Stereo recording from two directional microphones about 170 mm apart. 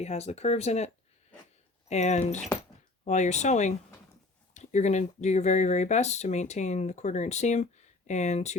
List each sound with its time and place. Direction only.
0.0 s speech: 40° left (ahead or behind)
1.9 s speech: 40° left (ahead or behind)